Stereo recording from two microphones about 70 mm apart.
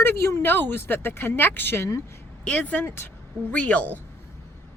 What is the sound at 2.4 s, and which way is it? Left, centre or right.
A woman's voice, centre.